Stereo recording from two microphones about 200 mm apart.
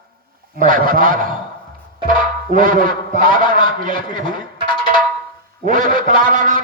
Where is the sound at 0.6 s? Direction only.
45° right (ahead or behind).